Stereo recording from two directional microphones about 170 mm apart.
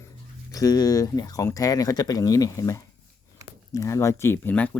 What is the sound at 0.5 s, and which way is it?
Speech, 20° left (ahead or behind).